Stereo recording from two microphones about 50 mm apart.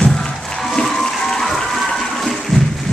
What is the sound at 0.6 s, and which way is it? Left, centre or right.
Music, centre.